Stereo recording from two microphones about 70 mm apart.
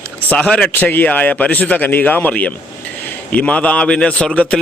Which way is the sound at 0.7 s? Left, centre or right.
Left.